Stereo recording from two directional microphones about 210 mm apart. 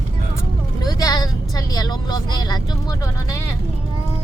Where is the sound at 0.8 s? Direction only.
20° left (ahead or behind).